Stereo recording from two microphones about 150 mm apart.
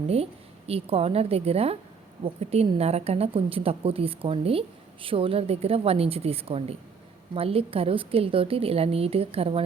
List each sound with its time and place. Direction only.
0.7 s a woman's voice: 40° right (ahead or behind)